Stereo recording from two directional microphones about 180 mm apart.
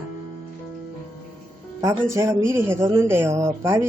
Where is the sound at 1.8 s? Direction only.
15° right (ahead or behind).